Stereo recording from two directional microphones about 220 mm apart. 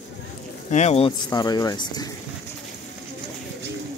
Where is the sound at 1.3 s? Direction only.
15° left (ahead or behind).